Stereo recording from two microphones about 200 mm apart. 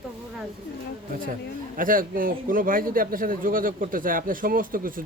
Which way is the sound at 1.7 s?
45° right (ahead or behind).